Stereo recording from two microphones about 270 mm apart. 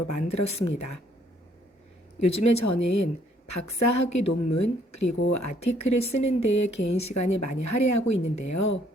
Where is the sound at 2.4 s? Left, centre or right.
Left.